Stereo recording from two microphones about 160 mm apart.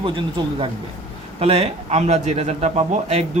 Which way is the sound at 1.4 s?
40° right (ahead or behind).